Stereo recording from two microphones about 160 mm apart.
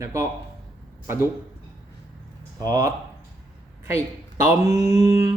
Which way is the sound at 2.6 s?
25° right (ahead or behind).